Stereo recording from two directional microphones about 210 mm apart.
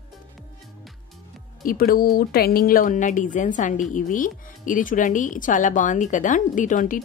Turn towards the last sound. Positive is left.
turn(degrees=35)  # may be behind; listen again after turning